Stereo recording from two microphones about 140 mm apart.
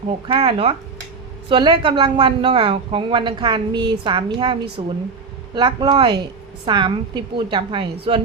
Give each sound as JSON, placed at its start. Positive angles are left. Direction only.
{"t": 0.3, "sound": "a woman's voice", "side_deg": -40}